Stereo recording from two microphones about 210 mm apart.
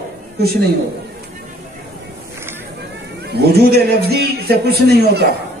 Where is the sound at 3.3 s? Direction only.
50° right (ahead or behind).